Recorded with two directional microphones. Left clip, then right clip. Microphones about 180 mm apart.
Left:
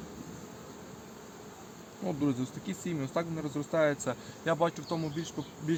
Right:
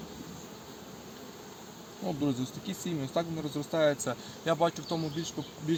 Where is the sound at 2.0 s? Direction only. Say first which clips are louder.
Even; 5° right (ahead or behind).